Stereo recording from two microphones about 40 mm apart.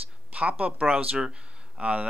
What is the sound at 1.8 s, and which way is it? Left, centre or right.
Speech, right.